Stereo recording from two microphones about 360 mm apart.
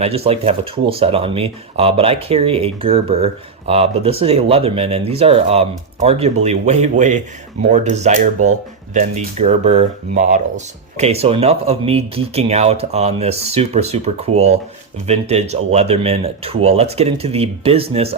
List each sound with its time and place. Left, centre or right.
0.0 s speech: centre